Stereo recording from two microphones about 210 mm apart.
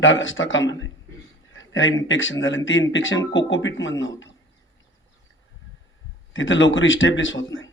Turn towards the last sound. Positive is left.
turn(degrees=65)  # may be behind; listen again after turning